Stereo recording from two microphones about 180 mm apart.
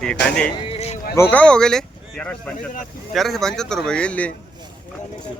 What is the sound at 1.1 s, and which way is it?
Speech, 10° left (ahead or behind).